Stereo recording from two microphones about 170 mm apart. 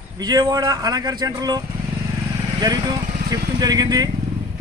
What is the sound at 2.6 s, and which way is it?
A man's voice, 25° right (ahead or behind).